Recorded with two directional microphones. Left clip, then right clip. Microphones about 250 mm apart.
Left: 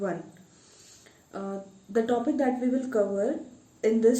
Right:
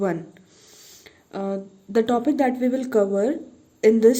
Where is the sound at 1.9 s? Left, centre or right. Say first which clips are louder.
Right 5 dB; right.